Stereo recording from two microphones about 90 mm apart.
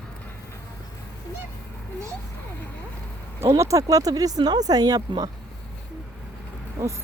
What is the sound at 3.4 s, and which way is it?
Speech, 30° right (ahead or behind).